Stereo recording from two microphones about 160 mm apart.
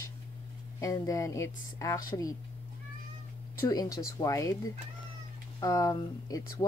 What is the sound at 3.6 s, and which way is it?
Speech, 20° left (ahead or behind).